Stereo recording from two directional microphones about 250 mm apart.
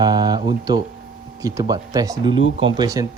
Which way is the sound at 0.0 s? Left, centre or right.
Centre.